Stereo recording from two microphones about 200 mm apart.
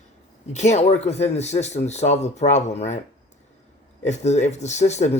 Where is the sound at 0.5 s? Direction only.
35° left (ahead or behind).